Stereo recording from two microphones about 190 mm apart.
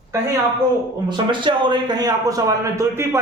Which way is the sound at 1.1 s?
25° right (ahead or behind).